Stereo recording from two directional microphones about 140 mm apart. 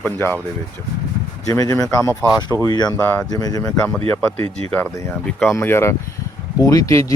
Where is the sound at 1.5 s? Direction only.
25° left (ahead or behind).